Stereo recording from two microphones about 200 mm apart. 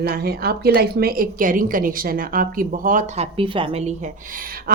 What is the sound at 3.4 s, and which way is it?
Speech, 25° right (ahead or behind).